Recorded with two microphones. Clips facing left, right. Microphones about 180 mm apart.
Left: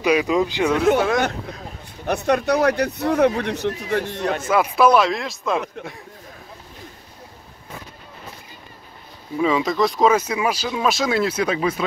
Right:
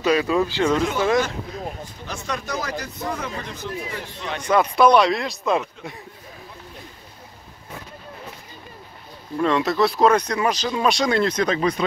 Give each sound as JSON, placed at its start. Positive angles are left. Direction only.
{"t": 0.0, "sound": "speech", "side_deg": 15}
{"t": 2.0, "sound": "speech", "side_deg": 60}
{"t": 4.4, "sound": "speech", "side_deg": 5}
{"t": 9.4, "sound": "speech", "side_deg": 0}